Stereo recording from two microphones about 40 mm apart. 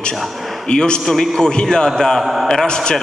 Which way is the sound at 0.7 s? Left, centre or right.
Left.